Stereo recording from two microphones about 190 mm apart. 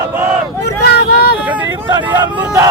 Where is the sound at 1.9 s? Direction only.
20° right (ahead or behind).